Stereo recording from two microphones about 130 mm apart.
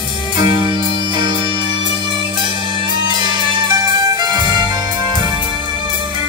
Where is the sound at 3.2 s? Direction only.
35° right (ahead or behind).